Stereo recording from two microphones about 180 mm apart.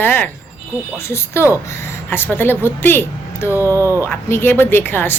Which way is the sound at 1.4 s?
15° left (ahead or behind).